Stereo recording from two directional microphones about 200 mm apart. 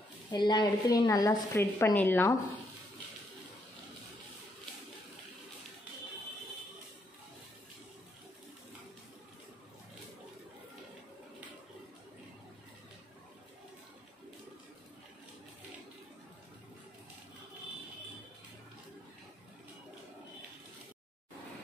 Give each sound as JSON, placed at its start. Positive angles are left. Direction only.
{"t": 0.3, "sound": "a woman's voice", "side_deg": 20}